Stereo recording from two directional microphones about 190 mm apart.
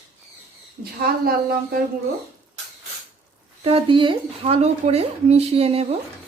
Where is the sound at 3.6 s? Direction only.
30° right (ahead or behind).